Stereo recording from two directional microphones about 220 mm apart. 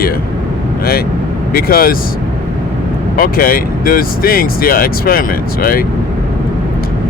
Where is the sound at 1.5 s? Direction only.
40° left (ahead or behind).